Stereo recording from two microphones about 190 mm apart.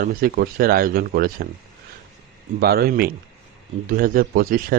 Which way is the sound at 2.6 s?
55° right (ahead or behind).